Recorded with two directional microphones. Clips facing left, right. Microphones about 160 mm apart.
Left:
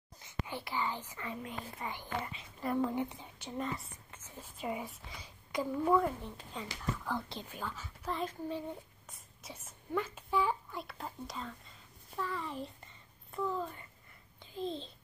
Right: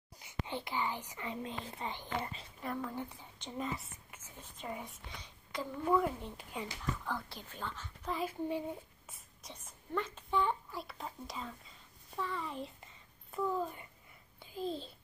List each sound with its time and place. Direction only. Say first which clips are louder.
0.2 s a child's voice: right 1 dB; 15° right (ahead or behind)
2.8 s speech: left 7 dB; 20° left (ahead or behind)
3.5 s a woman's voice: left 1 dB; centre (ahead or behind)
6.2 s speech: right 1 dB; 15° right (ahead or behind)
7.2 s speech: left 5 dB; 20° left (ahead or behind)
7.4 s speech: left 1 dB; 10° left (ahead or behind)
8.2 s speech: right 3 dB; 10° right (ahead or behind)
9.4 s a child's voice: left 3 dB; 5° left (ahead or behind)